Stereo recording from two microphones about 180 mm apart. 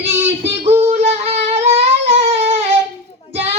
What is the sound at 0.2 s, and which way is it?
Child singing, 35° right (ahead or behind).